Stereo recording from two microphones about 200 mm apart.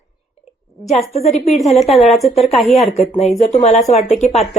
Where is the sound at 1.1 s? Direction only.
35° left (ahead or behind).